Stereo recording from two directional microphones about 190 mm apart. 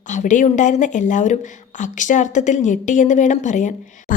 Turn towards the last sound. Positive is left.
turn(degrees=40)  # may be behind; listen again after turning